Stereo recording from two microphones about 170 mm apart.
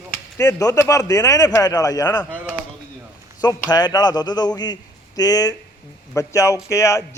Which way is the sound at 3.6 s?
25° left (ahead or behind).